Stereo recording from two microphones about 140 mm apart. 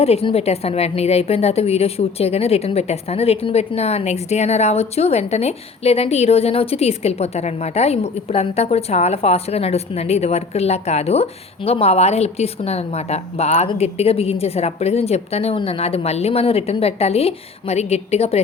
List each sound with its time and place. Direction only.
0.0 s a woman's voice: 45° left (ahead or behind)